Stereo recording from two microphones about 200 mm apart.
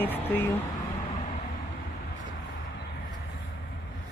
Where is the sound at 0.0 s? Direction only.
10° left (ahead or behind).